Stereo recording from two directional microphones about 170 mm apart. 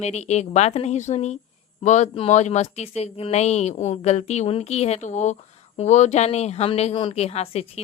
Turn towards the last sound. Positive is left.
turn(degrees=35)  # may be behind; listen again after turning